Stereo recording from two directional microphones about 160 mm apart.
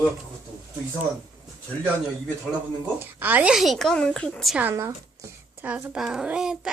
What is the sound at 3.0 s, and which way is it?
A child's voice, 10° right (ahead or behind).